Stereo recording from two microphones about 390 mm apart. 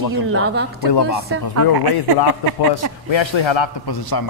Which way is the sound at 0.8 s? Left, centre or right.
Left.